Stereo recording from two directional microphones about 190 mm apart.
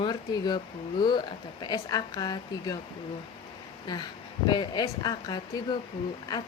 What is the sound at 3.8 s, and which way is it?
A woman's voice, 20° left (ahead or behind).